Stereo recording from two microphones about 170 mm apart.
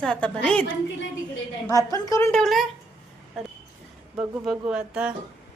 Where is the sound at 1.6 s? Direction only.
20° left (ahead or behind).